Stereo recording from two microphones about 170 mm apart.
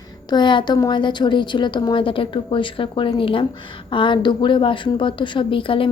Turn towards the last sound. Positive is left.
turn(degrees=30)  # may be behind; listen again after turning